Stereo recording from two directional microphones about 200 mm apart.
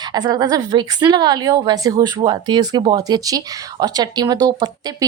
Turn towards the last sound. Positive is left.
turn(degrees=-20)  # may be behind; listen again after turning